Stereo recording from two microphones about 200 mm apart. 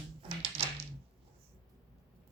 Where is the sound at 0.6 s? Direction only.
30° right (ahead or behind).